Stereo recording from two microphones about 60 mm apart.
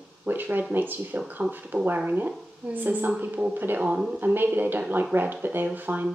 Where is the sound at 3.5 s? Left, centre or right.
Right.